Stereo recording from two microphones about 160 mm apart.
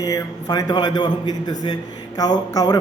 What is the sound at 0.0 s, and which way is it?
A man's voice, 25° left (ahead or behind).